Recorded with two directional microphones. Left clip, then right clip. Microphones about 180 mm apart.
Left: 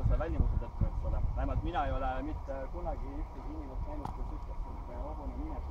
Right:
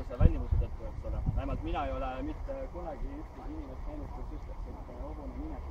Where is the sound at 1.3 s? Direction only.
35° right (ahead or behind).